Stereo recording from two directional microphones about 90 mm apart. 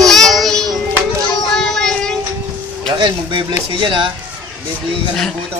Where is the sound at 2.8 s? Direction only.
60° right (ahead or behind).